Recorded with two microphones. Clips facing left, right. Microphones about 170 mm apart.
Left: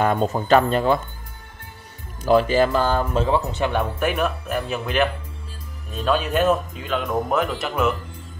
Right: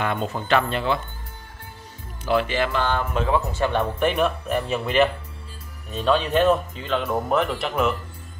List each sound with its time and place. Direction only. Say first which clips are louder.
0.0 s speech: left 5 dB; 40° left (ahead or behind)
2.2 s speech: left 5 dB; 40° left (ahead or behind)
3.5 s speech: even; 15° left (ahead or behind)
4.0 s speech: right 1 dB; 5° left (ahead or behind)